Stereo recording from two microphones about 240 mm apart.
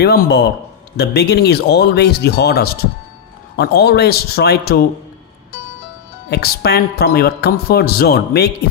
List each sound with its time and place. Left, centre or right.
0.0 s a woman's voice: left
6.3 s a woman's voice: left